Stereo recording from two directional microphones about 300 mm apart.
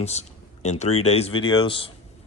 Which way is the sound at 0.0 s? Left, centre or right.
Left.